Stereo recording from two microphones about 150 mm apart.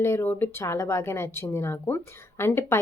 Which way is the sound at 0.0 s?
15° left (ahead or behind).